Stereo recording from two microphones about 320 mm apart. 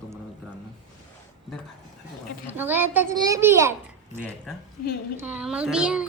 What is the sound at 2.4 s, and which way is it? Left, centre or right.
A woman's voice, centre.